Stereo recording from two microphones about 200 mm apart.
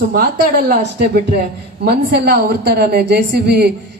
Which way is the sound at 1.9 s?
55° right (ahead or behind).